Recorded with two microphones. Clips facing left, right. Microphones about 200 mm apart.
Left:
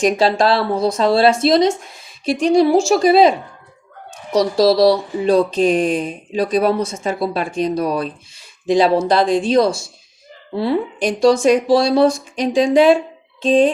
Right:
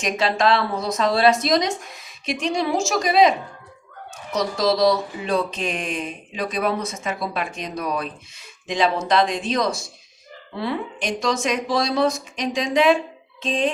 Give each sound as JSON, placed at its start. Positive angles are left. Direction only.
{"t": 0.0, "sound": "speech", "side_deg": 35}